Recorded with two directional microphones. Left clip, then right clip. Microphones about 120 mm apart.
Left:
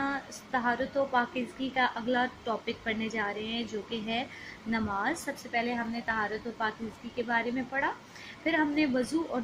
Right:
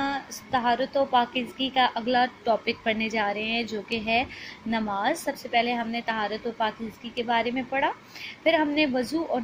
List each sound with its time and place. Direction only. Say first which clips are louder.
0.0 s a woman's voice: right 4 dB; 35° right (ahead or behind)